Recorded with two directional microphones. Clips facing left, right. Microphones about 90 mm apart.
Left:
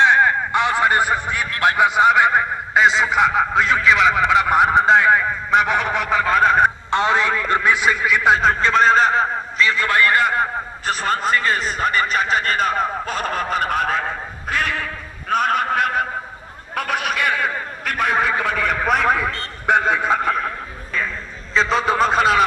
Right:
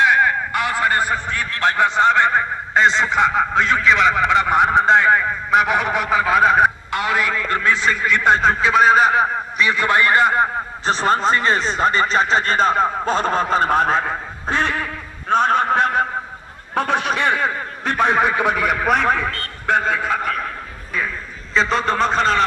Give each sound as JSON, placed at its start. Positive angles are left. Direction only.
{"t": 0.0, "sound": "a man's voice", "side_deg": 25}
{"t": 6.9, "sound": "a man's voice", "side_deg": 25}
{"t": 14.5, "sound": "a sound", "side_deg": -30}
{"t": 16.7, "sound": "a man's voice", "side_deg": -30}
{"t": 18.8, "sound": "a man's voice", "side_deg": 0}
{"t": 19.3, "sound": "a man's voice", "side_deg": 20}
{"t": 21.5, "sound": "a man's voice", "side_deg": 0}